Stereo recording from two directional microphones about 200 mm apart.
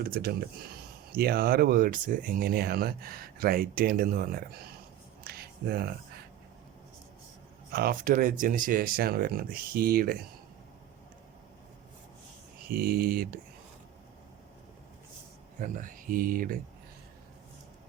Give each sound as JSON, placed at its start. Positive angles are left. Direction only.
{"t": 0.0, "sound": "speech", "side_deg": -50}
{"t": 5.2, "sound": "a sound", "side_deg": -50}
{"t": 7.7, "sound": "speech", "side_deg": -50}
{"t": 12.6, "sound": "speech", "side_deg": -50}
{"t": 15.5, "sound": "speech", "side_deg": -40}